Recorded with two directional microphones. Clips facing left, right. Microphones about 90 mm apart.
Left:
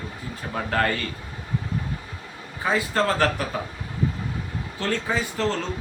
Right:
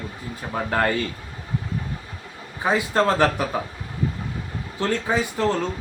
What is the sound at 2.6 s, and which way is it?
Speech, 20° right (ahead or behind).